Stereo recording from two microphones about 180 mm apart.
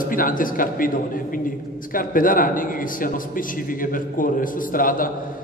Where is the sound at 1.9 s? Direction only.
50° left (ahead or behind).